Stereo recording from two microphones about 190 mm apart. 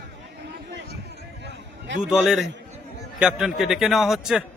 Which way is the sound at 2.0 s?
5° right (ahead or behind).